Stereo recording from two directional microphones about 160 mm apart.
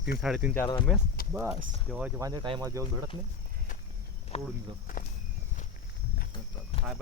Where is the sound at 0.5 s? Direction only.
15° left (ahead or behind).